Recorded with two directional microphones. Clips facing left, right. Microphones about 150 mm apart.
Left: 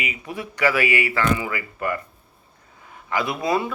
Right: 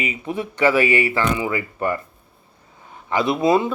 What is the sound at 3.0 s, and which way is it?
Speech, 25° right (ahead or behind).